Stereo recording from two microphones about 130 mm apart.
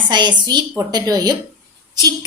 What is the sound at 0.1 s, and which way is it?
A woman's voice, 35° right (ahead or behind).